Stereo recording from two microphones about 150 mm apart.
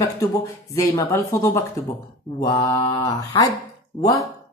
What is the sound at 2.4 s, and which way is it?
Speech, 30° left (ahead or behind).